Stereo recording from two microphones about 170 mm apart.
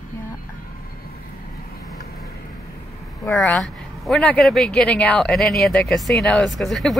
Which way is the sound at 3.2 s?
20° left (ahead or behind).